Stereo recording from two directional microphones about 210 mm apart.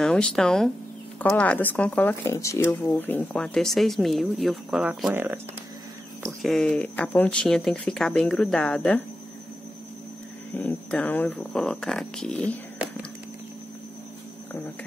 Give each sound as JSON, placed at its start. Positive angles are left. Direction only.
{"t": 0.0, "sound": "speech", "side_deg": 5}
{"t": 6.4, "sound": "speech", "side_deg": 0}
{"t": 10.5, "sound": "speech", "side_deg": 10}